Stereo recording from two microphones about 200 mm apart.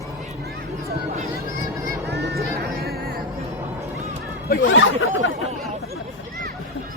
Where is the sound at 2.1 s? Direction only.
55° right (ahead or behind).